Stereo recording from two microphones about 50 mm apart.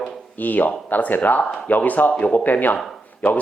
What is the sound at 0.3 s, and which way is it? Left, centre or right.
Speech, left.